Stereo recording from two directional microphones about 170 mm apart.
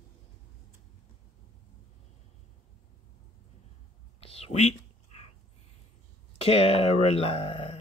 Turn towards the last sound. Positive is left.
turn(degrees=35)  # may be behind; listen again after turning